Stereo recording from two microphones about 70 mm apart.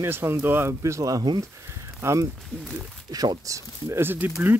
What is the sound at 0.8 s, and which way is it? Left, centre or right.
Speech, right.